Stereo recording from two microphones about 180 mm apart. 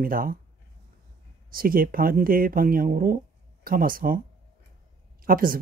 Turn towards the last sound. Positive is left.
turn(degrees=-50)  # may be behind; listen again after turning